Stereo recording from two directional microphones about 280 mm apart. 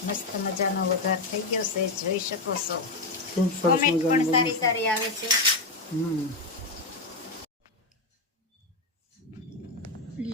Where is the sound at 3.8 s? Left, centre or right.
Left.